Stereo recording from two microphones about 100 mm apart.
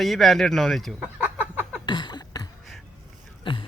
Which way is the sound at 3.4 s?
60° left (ahead or behind).